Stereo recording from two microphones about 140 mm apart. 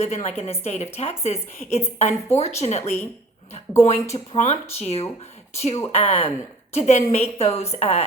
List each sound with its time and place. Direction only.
0.0 s a woman's voice: 55° left (ahead or behind)
4.1 s a woman's voice: 50° left (ahead or behind)